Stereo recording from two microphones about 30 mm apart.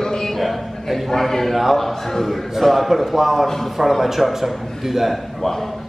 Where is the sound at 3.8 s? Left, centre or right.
Centre.